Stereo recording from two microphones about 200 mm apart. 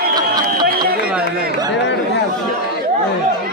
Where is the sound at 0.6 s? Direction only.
50° right (ahead or behind).